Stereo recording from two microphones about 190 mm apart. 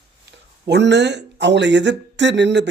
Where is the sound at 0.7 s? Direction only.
65° right (ahead or behind).